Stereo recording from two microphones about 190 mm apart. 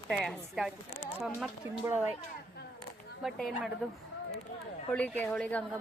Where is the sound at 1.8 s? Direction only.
10° right (ahead or behind).